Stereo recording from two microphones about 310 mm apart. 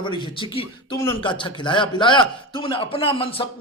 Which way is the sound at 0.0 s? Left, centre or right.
Centre.